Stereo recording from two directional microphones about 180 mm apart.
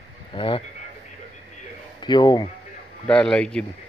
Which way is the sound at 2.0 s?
25° left (ahead or behind).